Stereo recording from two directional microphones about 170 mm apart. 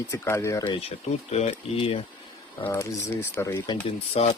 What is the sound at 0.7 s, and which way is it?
Speech, 40° left (ahead or behind).